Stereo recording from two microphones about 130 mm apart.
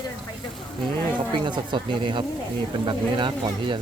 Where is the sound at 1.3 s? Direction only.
35° right (ahead or behind).